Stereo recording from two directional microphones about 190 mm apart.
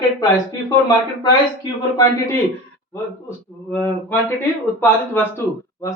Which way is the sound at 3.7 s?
10° left (ahead or behind).